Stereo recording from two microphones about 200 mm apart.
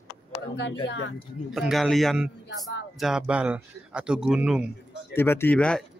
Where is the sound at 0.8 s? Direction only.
70° left (ahead or behind).